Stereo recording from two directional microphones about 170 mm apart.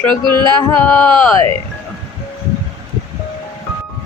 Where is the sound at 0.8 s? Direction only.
10° left (ahead or behind).